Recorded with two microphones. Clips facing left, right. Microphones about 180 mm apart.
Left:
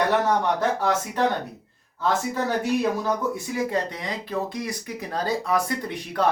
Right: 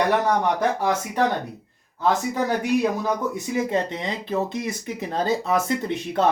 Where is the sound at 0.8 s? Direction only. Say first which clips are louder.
Right 1 dB; 15° right (ahead or behind).